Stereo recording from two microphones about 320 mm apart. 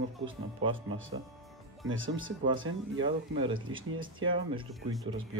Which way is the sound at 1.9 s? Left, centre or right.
Right.